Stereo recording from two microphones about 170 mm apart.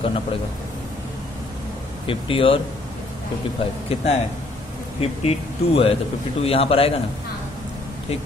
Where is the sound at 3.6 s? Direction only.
35° left (ahead or behind).